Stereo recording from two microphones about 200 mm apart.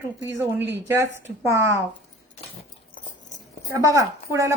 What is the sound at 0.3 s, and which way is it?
Speech, 10° right (ahead or behind).